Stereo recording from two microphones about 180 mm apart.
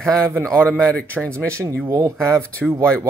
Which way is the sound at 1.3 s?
15° right (ahead or behind).